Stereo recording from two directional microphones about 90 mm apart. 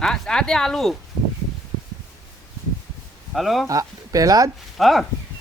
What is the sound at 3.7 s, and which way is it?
Speech, 40° right (ahead or behind).